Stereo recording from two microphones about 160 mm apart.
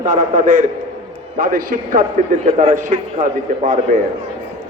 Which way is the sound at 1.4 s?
60° right (ahead or behind).